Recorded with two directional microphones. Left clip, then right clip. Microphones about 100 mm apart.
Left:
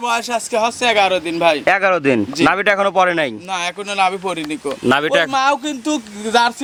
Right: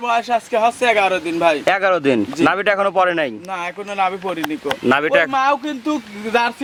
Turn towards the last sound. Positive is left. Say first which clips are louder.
# left 3 dB
turn(degrees=45)  # may be behind; listen again after turning